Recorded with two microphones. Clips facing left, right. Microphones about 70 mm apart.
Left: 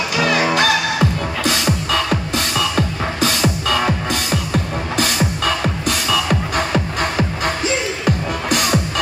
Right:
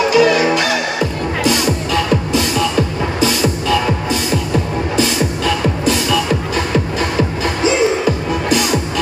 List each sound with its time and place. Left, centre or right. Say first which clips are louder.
0.2 s music: right 4 dB; left